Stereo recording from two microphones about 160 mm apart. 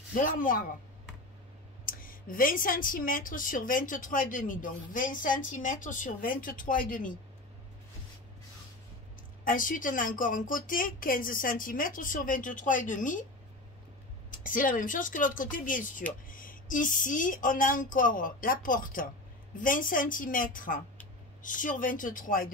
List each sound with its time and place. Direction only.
0.1 s a woman's voice: 55° left (ahead or behind)
1.9 s a woman's voice: 60° left (ahead or behind)
9.4 s a woman's voice: 60° left (ahead or behind)
14.3 s a woman's voice: 55° left (ahead or behind)